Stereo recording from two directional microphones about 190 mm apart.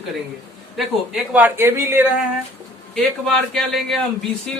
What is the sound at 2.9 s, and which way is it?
A man's voice, centre (ahead or behind).